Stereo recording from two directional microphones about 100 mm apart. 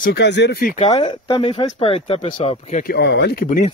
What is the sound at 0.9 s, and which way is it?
Speech, 55° left (ahead or behind).